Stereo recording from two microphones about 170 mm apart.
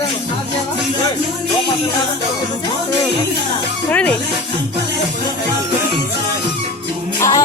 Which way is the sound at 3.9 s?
5° left (ahead or behind).